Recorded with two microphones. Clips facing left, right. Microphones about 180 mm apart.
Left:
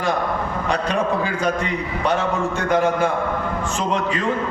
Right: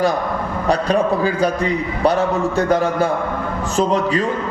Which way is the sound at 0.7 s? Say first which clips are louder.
Right 5 dB; 35° right (ahead or behind).